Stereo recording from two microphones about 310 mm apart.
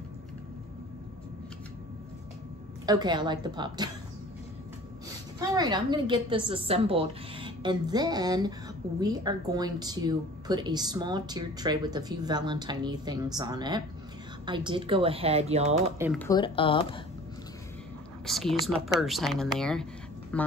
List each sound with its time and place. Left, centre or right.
2.9 s speech: centre
5.4 s speech: centre
16.2 s speech: centre
18.2 s speech: centre